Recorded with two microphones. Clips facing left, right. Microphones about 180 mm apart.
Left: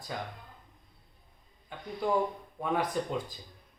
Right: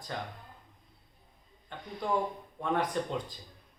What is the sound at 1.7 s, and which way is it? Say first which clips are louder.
Speech: left 2 dB; 10° left (ahead or behind).